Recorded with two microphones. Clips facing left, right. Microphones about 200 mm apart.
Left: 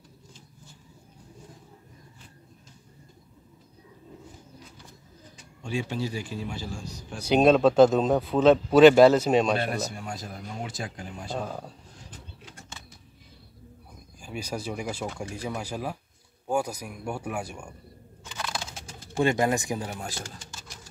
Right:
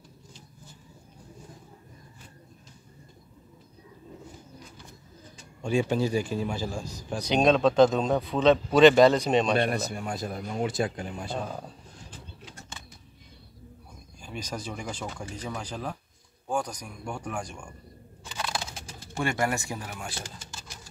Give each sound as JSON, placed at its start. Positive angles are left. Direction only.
{"t": 5.6, "sound": "a man's voice", "side_deg": -50}
{"t": 7.2, "sound": "speech", "side_deg": 5}
{"t": 9.6, "sound": "speech", "side_deg": -55}
{"t": 11.3, "sound": "speech", "side_deg": 5}
{"t": 14.2, "sound": "speech", "side_deg": 10}
{"t": 19.1, "sound": "speech", "side_deg": 20}
{"t": 19.9, "sound": "speech", "side_deg": 40}